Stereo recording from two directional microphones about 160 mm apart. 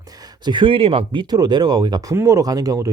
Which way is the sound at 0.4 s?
30° right (ahead or behind).